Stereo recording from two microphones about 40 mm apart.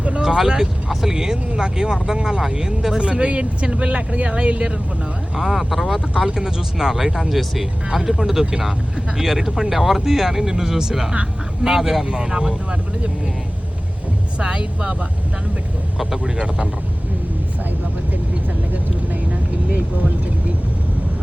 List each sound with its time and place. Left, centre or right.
0.2 s speech: centre
5.4 s speech: centre
6.1 s speech: centre
12.1 s speech: centre
14.3 s speech: right
16.0 s speech: centre